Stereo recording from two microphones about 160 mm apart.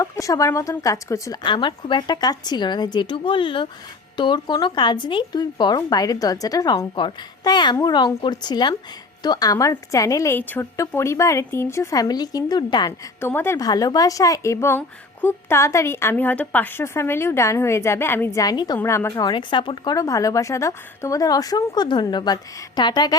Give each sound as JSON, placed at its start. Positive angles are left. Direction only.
{"t": 0.0, "sound": "speech", "side_deg": 20}
{"t": 13.1, "sound": "a woman's voice", "side_deg": 15}
{"t": 19.1, "sound": "speech", "side_deg": 25}